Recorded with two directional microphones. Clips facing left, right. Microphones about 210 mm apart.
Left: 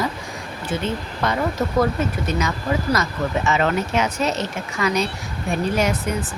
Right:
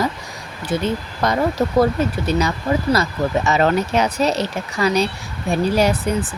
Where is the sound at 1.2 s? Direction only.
40° right (ahead or behind).